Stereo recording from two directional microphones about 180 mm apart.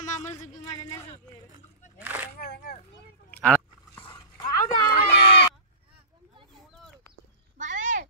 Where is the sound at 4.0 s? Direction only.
25° left (ahead or behind).